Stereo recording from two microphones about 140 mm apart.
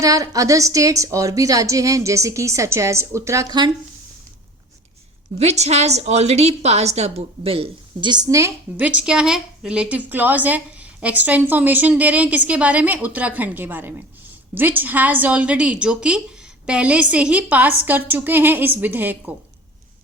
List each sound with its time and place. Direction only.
0.0 s a woman's voice: 25° right (ahead or behind)
5.4 s a woman's voice: 50° right (ahead or behind); by 19.3 s 10° right (ahead or behind)